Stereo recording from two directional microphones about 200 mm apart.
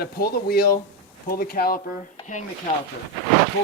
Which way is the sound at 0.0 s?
50° left (ahead or behind).